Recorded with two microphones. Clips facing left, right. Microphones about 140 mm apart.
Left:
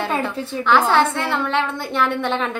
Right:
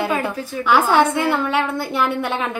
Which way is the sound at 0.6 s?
10° right (ahead or behind).